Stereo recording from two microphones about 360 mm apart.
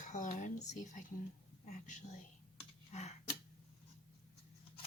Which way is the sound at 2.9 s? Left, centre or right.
Centre.